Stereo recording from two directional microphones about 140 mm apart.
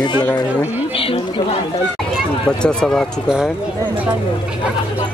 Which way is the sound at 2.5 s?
5° left (ahead or behind).